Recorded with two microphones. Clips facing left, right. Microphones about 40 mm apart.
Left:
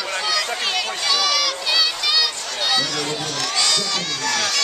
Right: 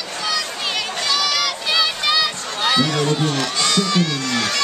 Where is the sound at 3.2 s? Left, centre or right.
Right.